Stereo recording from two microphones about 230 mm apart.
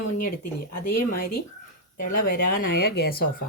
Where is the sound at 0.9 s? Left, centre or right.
Left.